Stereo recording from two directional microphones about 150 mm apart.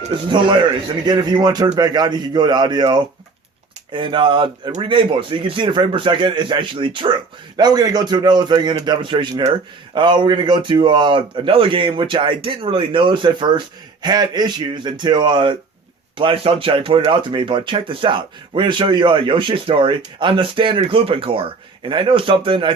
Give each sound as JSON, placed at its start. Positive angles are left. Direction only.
{"t": 0.3, "sound": "a man's voice", "side_deg": -30}